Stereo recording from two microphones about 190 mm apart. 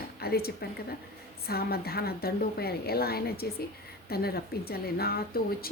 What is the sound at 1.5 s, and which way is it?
A woman's voice, 55° left (ahead or behind).